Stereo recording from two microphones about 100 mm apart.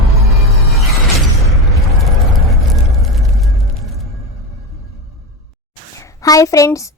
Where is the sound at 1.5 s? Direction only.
Centre (ahead or behind).